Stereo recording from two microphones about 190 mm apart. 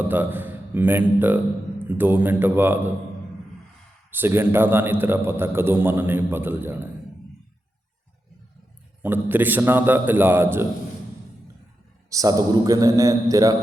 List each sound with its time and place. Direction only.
0.1 s a man's voice: 10° right (ahead or behind)
4.1 s a man's voice: 10° right (ahead or behind)
9.0 s a man's voice: 10° right (ahead or behind)
12.1 s a man's voice: 20° right (ahead or behind)